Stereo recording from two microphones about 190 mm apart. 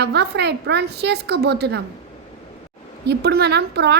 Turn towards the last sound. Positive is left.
turn(degrees=-60)  # may be behind; listen again after turning